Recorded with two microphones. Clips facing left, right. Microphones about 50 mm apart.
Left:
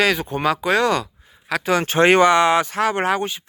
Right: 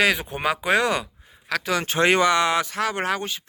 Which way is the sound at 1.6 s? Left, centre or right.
Left.